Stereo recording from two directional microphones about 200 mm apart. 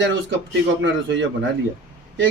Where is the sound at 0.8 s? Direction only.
65° right (ahead or behind).